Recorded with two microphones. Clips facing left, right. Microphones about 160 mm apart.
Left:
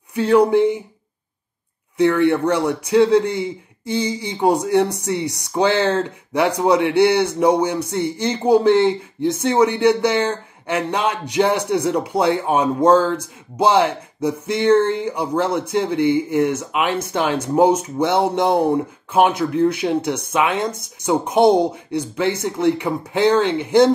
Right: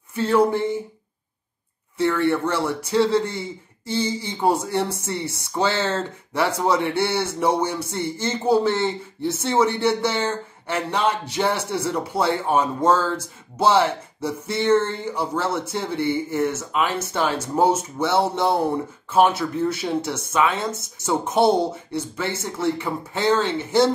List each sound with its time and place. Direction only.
0.1 s a man's voice: 15° left (ahead or behind)
2.0 s a man's voice: 15° left (ahead or behind)